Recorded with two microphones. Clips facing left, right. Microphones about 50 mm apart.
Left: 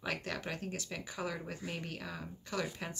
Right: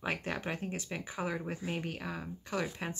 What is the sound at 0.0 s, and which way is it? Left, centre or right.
Speech, right.